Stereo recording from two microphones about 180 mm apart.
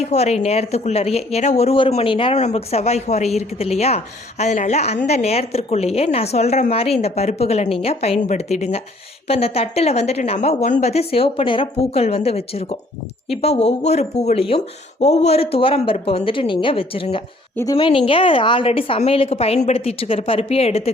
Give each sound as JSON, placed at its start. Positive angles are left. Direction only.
{"t": 0.0, "sound": "a woman's voice", "side_deg": 40}